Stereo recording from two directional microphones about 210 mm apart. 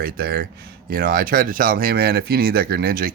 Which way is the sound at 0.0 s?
45° right (ahead or behind).